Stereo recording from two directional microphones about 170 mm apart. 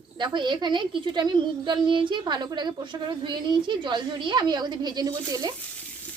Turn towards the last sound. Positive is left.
turn(degrees=-20)  # may be behind; listen again after turning